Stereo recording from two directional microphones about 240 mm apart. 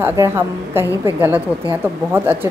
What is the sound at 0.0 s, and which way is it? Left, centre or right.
Speech, centre.